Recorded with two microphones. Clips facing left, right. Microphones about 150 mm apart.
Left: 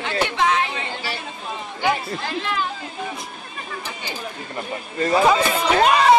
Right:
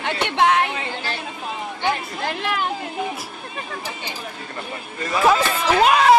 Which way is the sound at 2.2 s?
60° right (ahead or behind).